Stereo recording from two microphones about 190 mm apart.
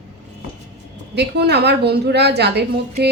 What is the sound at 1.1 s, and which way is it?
A woman's voice, 60° right (ahead or behind).